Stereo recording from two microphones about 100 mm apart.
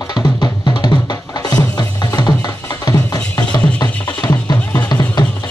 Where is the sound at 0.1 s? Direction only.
45° left (ahead or behind).